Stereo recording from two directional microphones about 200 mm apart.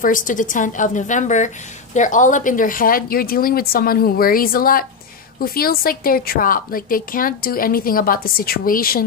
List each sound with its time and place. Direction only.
0.0 s a woman's voice: 40° left (ahead or behind)